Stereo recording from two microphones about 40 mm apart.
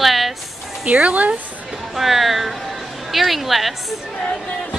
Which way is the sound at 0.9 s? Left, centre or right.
Right.